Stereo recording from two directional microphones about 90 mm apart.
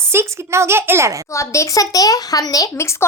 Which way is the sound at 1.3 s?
35° left (ahead or behind).